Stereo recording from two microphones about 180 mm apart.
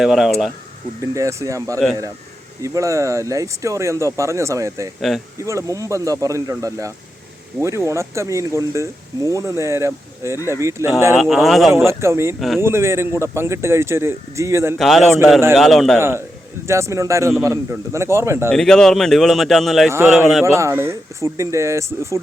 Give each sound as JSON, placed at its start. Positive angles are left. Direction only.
{"t": 0.0, "sound": "speech", "side_deg": 0}
{"t": 1.1, "sound": "speech", "side_deg": -15}
{"t": 4.9, "sound": "speech", "side_deg": 0}
{"t": 5.4, "sound": "speech", "side_deg": -15}
{"t": 11.2, "sound": "speech", "side_deg": 0}
{"t": 11.9, "sound": "speech", "side_deg": -15}
{"t": 14.8, "sound": "speech", "side_deg": 0}
{"t": 16.0, "sound": "speech", "side_deg": -15}
{"t": 18.5, "sound": "speech", "side_deg": 5}
{"t": 20.4, "sound": "speech", "side_deg": -15}